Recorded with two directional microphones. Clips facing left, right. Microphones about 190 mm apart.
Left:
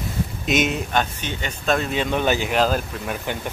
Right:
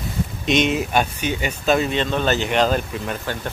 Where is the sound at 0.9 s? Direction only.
10° right (ahead or behind).